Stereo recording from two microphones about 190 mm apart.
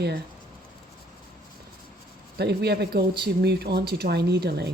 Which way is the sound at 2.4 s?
60° right (ahead or behind).